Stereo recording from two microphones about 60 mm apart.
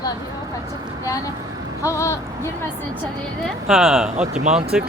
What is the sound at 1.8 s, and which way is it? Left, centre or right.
Speech, left.